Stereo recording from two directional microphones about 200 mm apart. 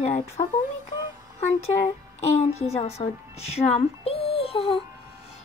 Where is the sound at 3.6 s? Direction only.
30° left (ahead or behind).